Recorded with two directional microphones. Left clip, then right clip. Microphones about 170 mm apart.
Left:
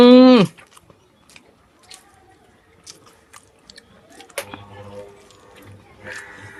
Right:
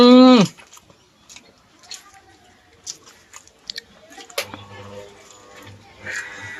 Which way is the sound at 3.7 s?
Centre (ahead or behind).